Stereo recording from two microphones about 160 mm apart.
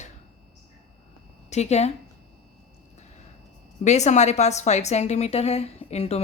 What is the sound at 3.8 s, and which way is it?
A woman's voice, 45° left (ahead or behind).